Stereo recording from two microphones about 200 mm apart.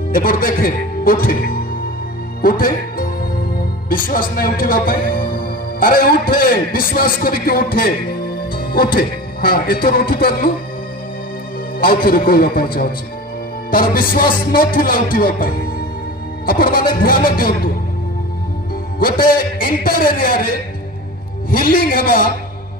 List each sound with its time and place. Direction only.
0.1 s music: 45° left (ahead or behind)
2.6 s music: 45° left (ahead or behind)
5.0 s a man's voice: 45° left (ahead or behind)
11.8 s music: 45° left (ahead or behind)
19.2 s music: 45° left (ahead or behind)